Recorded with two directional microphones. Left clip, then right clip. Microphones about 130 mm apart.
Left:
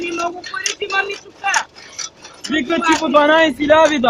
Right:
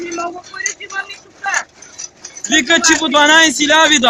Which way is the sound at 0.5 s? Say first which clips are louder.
Right 2 dB; 60° left (ahead or behind).